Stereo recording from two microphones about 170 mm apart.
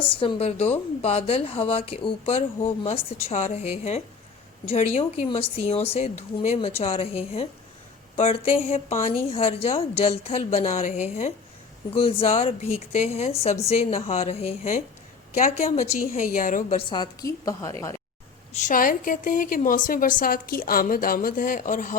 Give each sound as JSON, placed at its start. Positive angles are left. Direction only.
{"t": 0.2, "sound": "a woman's voice", "side_deg": 35}
{"t": 16.7, "sound": "a woman's voice", "side_deg": 25}
{"t": 18.5, "sound": "a woman's voice", "side_deg": 50}